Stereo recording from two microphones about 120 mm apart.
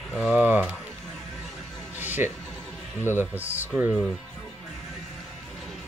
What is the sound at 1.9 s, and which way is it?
Music, 15° right (ahead or behind).